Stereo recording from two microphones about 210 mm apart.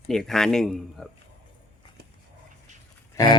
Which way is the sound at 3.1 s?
20° left (ahead or behind).